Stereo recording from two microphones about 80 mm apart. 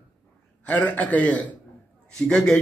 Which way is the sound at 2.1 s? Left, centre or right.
Centre.